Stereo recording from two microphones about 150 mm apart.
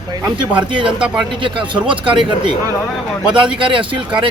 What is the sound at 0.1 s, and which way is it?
Speech, 30° right (ahead or behind).